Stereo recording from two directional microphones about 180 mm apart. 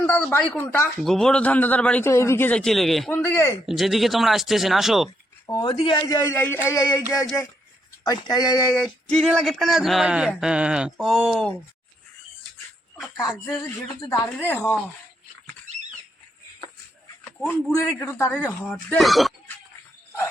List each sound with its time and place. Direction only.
0.0 s a man's voice: 10° left (ahead or behind)
0.9 s a man's voice: centre (ahead or behind)
3.1 s a man's voice: 15° left (ahead or behind)
3.7 s speech: centre (ahead or behind)
5.5 s a man's voice: 20° left (ahead or behind)
8.0 s a man's voice: 20° left (ahead or behind)
8.7 s speech: centre (ahead or behind)
13.1 s a man's voice: 20° left (ahead or behind)
17.4 s a man's voice: 5° left (ahead or behind)
17.7 s a man's voice: 15° left (ahead or behind); by 19.3 s centre (ahead or behind)